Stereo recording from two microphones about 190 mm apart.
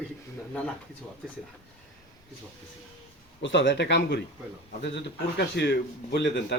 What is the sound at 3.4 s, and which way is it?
Speech, 70° left (ahead or behind).